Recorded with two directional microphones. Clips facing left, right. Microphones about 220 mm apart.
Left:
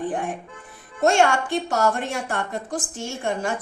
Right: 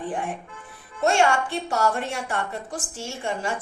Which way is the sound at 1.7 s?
40° left (ahead or behind).